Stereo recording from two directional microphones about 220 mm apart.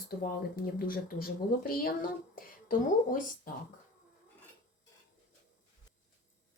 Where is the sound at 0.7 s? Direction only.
40° left (ahead or behind).